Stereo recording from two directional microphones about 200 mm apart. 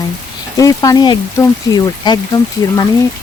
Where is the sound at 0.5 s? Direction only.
15° left (ahead or behind).